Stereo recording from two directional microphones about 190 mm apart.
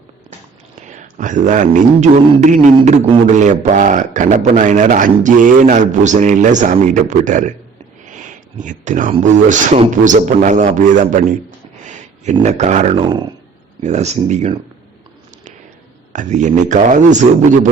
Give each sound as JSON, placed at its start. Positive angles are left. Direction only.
{"t": 0.8, "sound": "a man's voice", "side_deg": -40}
{"t": 8.2, "sound": "a sound", "side_deg": -40}
{"t": 9.1, "sound": "a man's voice", "side_deg": -35}
{"t": 16.1, "sound": "a man's voice", "side_deg": -40}